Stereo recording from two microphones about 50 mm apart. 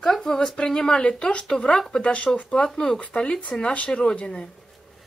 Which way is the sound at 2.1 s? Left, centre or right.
Left.